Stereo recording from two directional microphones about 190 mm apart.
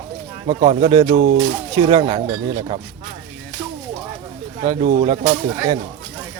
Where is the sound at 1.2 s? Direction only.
55° right (ahead or behind).